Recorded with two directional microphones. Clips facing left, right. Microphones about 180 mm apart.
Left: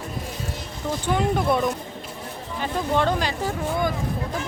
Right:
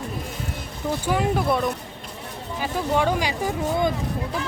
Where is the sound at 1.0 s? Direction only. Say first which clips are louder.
Left 1 dB; 5° right (ahead or behind).